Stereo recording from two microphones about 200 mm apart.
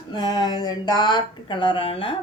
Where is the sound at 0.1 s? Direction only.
20° left (ahead or behind).